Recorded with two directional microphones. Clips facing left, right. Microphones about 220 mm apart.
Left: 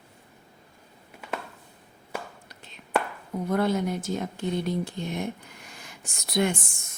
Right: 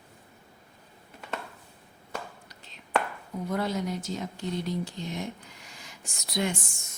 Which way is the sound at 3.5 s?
55° left (ahead or behind).